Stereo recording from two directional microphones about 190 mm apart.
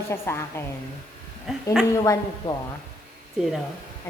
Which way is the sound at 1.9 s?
15° left (ahead or behind).